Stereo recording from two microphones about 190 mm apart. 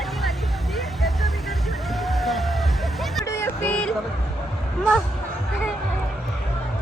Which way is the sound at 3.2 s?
15° left (ahead or behind).